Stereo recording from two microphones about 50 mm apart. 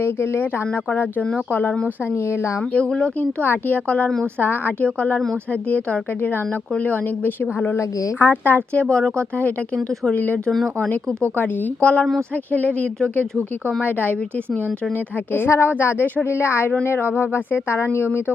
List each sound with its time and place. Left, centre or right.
0.0 s speech: left
0.7 s speech: left
2.1 s speech: left
2.7 s speech: centre
3.2 s speech: left
3.8 s speech: left
4.4 s speech: left
4.8 s speech: left
8.7 s speech: left
10.2 s speech: left
15.4 s speech: left